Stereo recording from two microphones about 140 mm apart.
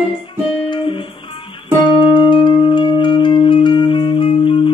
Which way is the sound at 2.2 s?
35° left (ahead or behind).